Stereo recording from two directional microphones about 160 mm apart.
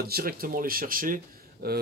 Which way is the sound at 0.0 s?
70° right (ahead or behind).